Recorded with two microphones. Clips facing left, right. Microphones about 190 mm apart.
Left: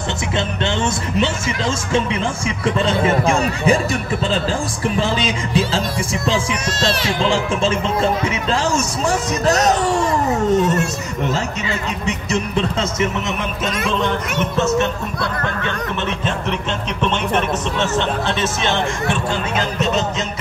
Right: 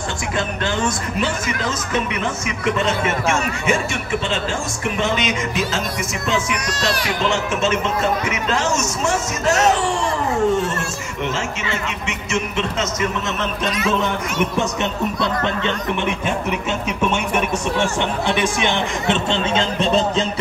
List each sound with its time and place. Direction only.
0.7 s speech: 25° left (ahead or behind)
2.6 s speech: 30° left (ahead or behind)
4.8 s speech: 30° left (ahead or behind)
10.6 s speech: 20° left (ahead or behind)
12.1 s speech: 35° left (ahead or behind)
14.4 s speech: 15° right (ahead or behind)
17.0 s speech: 10° right (ahead or behind); by 20.2 s 30° right (ahead or behind)